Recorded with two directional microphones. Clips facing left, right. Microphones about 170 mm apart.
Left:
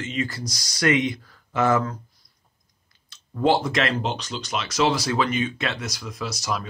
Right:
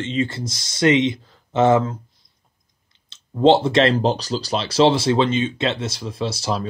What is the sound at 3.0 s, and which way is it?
Speech, 25° right (ahead or behind).